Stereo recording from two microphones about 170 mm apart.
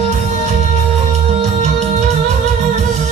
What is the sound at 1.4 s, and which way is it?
Music, 40° right (ahead or behind).